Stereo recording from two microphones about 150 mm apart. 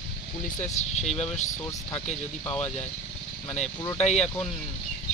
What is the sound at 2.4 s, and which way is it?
Speech, 10° left (ahead or behind).